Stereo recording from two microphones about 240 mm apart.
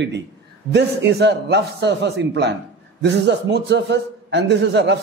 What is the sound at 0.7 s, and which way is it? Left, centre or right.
A man's voice, right.